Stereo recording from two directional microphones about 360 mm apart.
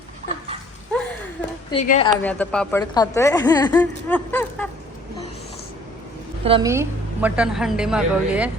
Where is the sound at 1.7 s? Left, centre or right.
Centre.